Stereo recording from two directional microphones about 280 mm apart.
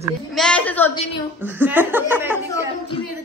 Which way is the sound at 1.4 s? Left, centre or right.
Centre.